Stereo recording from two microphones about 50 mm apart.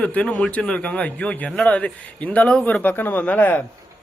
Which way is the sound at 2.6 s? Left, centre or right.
Left.